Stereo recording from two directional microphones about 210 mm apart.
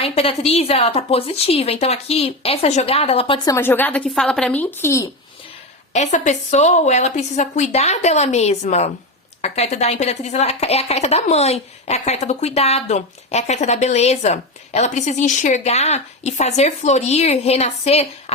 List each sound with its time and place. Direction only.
0.0 s a woman's voice: 30° left (ahead or behind); by 5.0 s 10° left (ahead or behind)
5.9 s speech: 35° left (ahead or behind)